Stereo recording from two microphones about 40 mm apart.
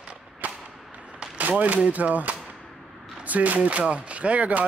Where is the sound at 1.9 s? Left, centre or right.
Right.